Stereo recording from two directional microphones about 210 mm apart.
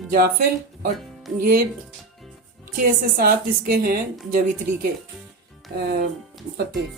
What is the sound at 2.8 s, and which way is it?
A woman's voice, 45° right (ahead or behind).